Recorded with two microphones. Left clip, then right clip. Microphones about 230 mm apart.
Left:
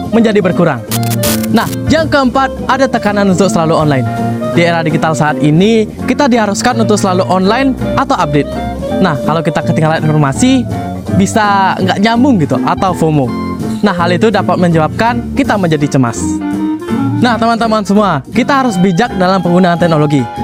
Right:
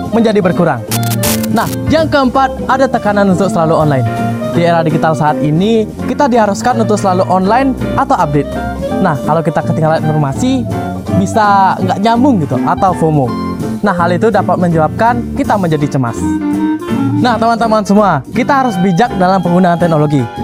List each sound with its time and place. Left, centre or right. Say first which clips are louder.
0.1 s speech: left 1 dB; left
17.2 s speech: even; left